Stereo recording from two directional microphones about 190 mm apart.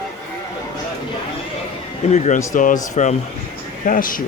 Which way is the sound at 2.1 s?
40° left (ahead or behind).